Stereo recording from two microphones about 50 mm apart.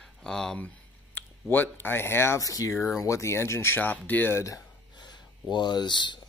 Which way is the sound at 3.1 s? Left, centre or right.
Left.